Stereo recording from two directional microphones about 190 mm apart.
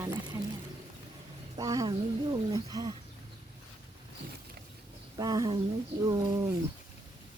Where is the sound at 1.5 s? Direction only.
20° right (ahead or behind).